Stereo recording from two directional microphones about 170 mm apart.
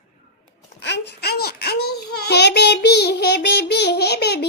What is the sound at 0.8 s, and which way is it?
Child singing, 90° left.